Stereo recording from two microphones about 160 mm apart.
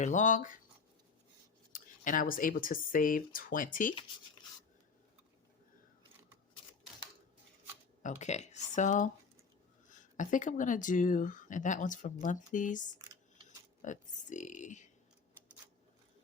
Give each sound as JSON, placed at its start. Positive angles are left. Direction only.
{"t": 0.0, "sound": "speech", "side_deg": 50}
{"t": 1.7, "sound": "speech", "side_deg": 55}
{"t": 8.0, "sound": "speech", "side_deg": 45}